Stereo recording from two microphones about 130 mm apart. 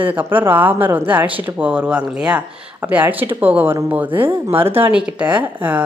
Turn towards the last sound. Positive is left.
turn(degrees=-10)  # may be behind; listen again after turning